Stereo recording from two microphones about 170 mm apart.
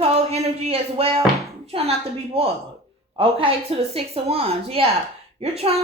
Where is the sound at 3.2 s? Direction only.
30° right (ahead or behind).